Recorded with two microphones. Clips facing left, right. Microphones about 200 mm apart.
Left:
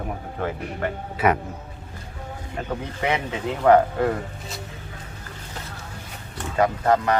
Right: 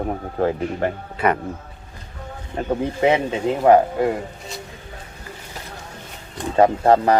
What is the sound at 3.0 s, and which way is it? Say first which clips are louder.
Speech: right 7 dB; 20° right (ahead or behind).